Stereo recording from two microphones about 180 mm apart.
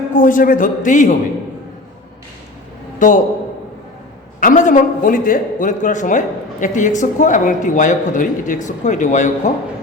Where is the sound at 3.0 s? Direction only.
45° left (ahead or behind).